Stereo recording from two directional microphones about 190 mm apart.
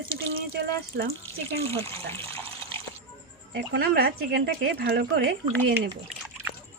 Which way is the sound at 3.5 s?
55° right (ahead or behind).